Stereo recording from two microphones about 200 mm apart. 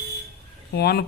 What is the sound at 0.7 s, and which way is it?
Speech, 55° left (ahead or behind).